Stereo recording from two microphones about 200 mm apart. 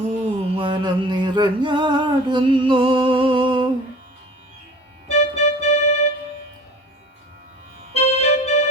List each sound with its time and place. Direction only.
0.3 s music: 25° right (ahead or behind)
5.0 s keyboard: 30° left (ahead or behind)
7.9 s music: 30° left (ahead or behind)